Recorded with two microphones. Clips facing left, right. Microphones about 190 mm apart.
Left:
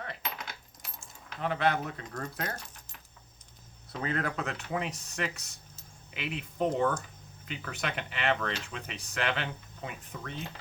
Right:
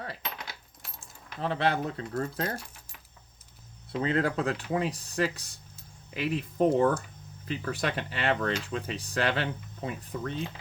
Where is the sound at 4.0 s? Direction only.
30° right (ahead or behind).